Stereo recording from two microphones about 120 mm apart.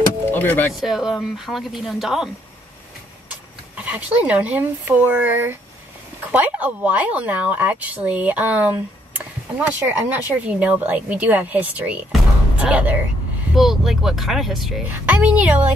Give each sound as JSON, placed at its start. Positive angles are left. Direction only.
{"t": 0.2, "sound": "music", "side_deg": 15}
{"t": 0.7, "sound": "a woman's voice", "side_deg": -5}